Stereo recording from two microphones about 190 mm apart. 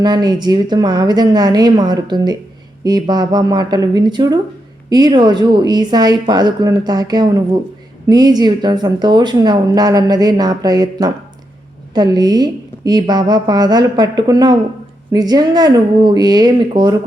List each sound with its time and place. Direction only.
0.0 s speech: 20° right (ahead or behind)